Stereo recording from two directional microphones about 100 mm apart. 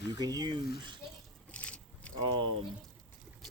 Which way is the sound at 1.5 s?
10° left (ahead or behind).